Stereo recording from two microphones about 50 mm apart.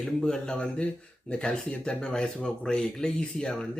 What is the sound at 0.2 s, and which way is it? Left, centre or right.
A man's voice, centre.